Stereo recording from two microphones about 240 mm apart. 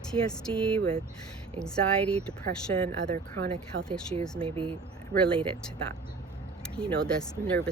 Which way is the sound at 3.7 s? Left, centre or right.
Right.